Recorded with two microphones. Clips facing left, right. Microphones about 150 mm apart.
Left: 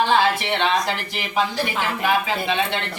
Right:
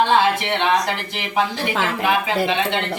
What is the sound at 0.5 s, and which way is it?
Speech, 15° right (ahead or behind).